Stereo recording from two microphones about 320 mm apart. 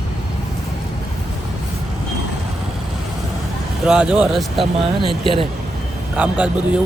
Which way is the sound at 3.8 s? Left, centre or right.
Centre.